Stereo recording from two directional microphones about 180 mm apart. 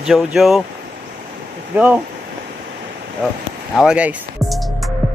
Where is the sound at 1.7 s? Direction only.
10° right (ahead or behind).